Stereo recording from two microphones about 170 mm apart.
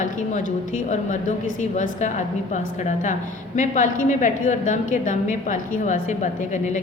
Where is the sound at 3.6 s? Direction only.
50° left (ahead or behind).